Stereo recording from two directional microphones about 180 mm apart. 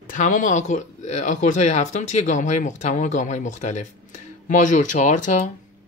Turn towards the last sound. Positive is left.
turn(degrees=45)  # may be behind; listen again after turning